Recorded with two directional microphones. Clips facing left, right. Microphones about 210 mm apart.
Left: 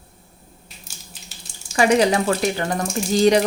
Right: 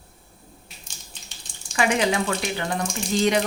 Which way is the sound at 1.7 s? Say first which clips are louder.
Left 5 dB; 40° left (ahead or behind).